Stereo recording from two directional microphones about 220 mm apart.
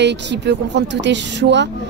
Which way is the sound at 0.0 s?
50° right (ahead or behind).